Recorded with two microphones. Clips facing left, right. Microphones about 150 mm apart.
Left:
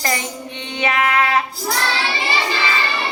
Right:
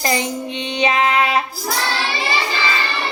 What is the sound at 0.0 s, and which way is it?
Music, 20° right (ahead or behind).